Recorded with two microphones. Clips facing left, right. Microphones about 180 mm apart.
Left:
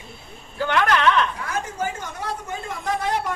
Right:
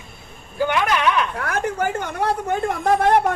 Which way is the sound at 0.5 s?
10° right (ahead or behind).